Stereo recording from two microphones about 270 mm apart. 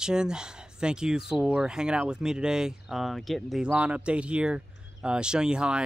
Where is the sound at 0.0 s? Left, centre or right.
Centre.